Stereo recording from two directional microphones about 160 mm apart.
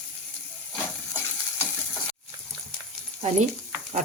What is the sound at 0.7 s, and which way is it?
Stir, 15° left (ahead or behind).